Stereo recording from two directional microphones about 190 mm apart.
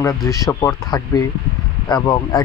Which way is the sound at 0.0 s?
15° left (ahead or behind).